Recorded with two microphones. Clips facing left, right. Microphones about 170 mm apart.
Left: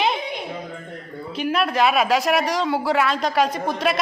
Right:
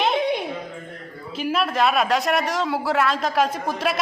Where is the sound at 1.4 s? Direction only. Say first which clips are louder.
Left 1 dB; centre (ahead or behind).